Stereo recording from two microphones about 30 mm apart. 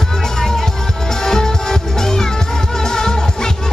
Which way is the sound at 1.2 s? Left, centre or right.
Centre.